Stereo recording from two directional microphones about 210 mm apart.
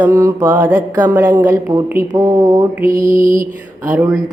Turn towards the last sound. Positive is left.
turn(degrees=-5)  # may be behind; listen again after turning